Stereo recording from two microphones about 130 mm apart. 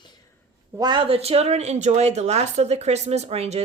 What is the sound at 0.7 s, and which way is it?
Speech, 35° right (ahead or behind).